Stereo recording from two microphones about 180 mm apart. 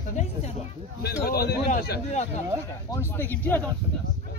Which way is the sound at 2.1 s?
40° left (ahead or behind).